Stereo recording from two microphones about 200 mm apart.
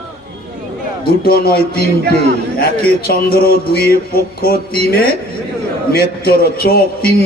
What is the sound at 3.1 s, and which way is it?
A man's voice, 50° left (ahead or behind).